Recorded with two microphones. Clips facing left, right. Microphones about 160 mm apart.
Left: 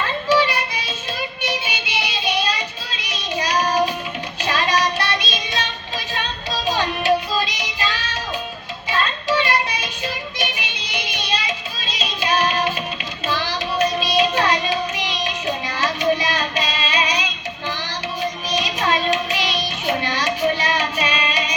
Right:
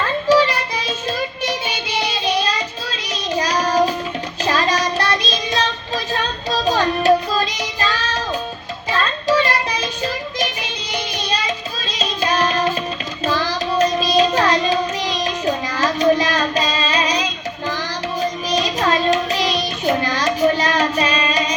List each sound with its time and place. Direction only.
0.3 s child singing: 40° right (ahead or behind)
1.4 s music: 40° right (ahead or behind)
2.9 s child singing: 40° right (ahead or behind)
18.2 s music: 40° right (ahead or behind)